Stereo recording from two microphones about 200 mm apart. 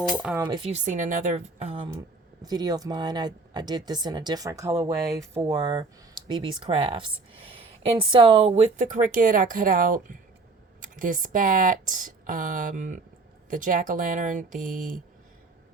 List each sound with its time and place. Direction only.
0.3 s speech: 5° right (ahead or behind)
0.6 s speech: 35° right (ahead or behind)